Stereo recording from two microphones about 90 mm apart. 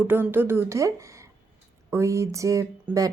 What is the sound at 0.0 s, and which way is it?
A woman's voice, 25° right (ahead or behind).